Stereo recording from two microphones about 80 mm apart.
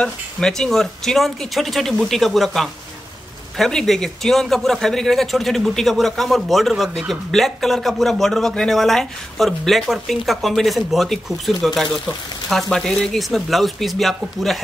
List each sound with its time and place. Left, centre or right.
0.0 s a man's voice: centre